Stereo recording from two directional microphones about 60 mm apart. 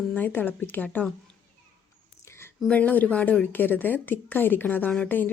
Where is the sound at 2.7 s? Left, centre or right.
Left.